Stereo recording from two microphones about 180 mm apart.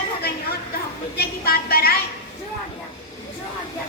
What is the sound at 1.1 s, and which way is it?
Speech, 60° left (ahead or behind).